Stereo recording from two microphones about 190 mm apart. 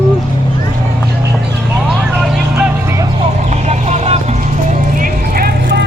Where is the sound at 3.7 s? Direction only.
35° right (ahead or behind).